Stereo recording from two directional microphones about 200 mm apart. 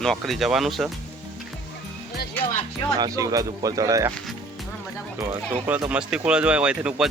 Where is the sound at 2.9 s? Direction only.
20° right (ahead or behind).